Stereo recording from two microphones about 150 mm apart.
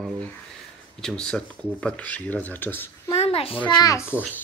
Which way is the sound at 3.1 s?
40° left (ahead or behind).